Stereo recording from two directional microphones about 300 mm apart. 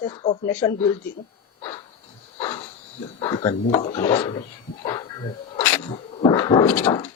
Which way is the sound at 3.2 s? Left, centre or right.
Centre.